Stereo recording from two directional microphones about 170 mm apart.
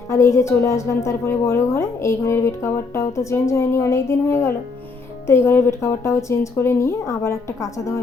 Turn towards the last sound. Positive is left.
turn(degrees=15)  # may be behind; listen again after turning